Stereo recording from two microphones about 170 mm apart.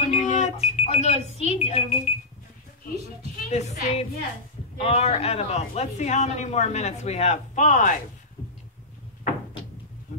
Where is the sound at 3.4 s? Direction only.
40° left (ahead or behind).